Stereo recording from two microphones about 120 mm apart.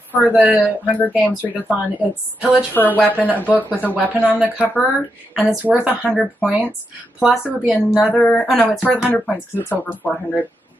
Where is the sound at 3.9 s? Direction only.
15° right (ahead or behind).